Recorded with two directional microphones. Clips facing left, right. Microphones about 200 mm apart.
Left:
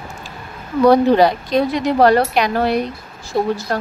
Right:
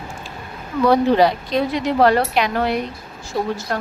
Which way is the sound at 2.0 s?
40° left (ahead or behind).